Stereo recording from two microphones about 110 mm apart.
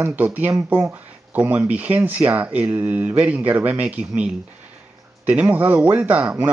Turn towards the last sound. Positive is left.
turn(degrees=-10)  # may be behind; listen again after turning